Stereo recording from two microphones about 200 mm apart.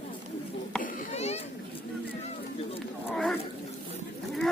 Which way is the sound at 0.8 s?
35° left (ahead or behind).